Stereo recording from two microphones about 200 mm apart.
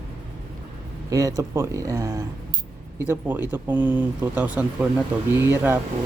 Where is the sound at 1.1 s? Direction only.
20° right (ahead or behind).